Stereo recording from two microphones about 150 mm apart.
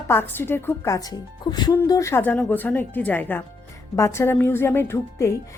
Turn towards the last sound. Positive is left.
turn(degrees=15)  # may be behind; listen again after turning